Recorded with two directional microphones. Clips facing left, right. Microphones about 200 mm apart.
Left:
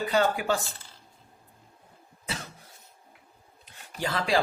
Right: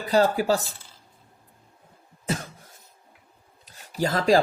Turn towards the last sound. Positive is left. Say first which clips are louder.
# right 7 dB
turn(degrees=-40)  # may be behind; listen again after turning